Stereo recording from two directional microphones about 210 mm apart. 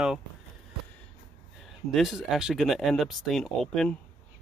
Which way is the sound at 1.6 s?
Centre (ahead or behind).